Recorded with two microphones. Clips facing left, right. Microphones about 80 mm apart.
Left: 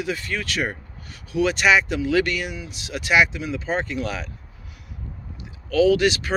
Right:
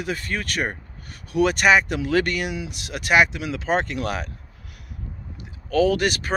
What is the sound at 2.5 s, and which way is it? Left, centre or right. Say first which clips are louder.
Speech: right 3 dB; right.